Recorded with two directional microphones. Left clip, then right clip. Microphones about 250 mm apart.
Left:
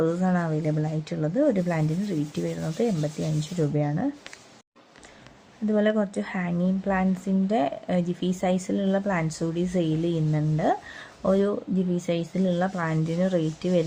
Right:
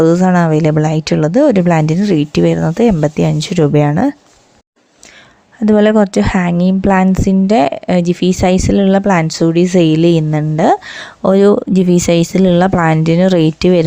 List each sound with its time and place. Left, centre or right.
0.0 s a woman's voice: right
5.6 s a woman's voice: right